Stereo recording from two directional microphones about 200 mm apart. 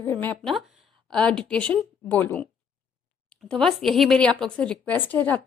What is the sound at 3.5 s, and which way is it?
Speech, centre (ahead or behind).